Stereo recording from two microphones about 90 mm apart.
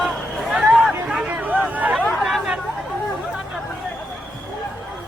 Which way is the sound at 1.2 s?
20° right (ahead or behind).